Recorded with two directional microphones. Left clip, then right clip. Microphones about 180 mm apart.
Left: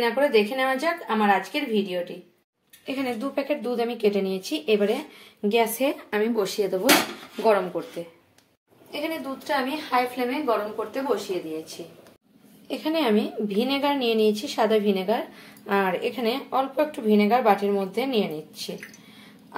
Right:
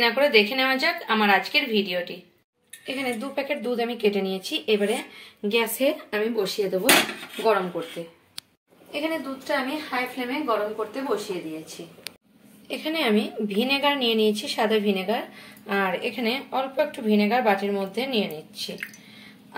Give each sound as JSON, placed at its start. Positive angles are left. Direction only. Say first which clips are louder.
{"t": 0.0, "sound": "a woman's voice", "louder": "right 2 dB", "side_deg": 10}
{"t": 12.6, "sound": "a woman's voice", "louder": "left 1 dB", "side_deg": 10}